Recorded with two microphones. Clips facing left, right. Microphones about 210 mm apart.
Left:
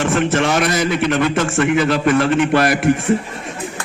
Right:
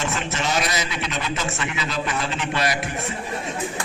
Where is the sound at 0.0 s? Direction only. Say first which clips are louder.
Left 10 dB; 50° left (ahead or behind).